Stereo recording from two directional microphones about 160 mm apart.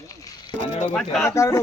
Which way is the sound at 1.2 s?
15° left (ahead or behind).